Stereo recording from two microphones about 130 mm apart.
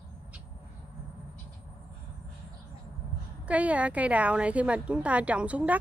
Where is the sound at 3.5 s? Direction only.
10° right (ahead or behind).